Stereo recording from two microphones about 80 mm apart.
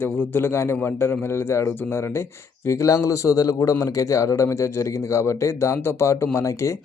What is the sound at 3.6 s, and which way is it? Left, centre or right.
A man's voice, left.